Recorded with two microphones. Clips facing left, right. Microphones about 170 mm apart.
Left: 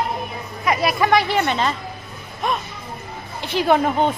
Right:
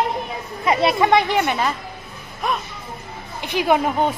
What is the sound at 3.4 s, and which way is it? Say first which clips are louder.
Speech: left 1 dB; 15° right (ahead or behind).